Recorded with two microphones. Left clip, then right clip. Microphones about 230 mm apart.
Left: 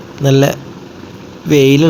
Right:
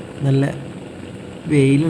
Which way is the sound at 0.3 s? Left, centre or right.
Centre.